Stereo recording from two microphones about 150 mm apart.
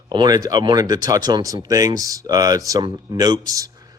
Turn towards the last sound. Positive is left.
turn(degrees=-25)  # may be behind; listen again after turning